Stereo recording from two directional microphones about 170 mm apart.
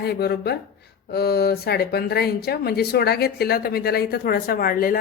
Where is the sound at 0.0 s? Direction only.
70° left (ahead or behind).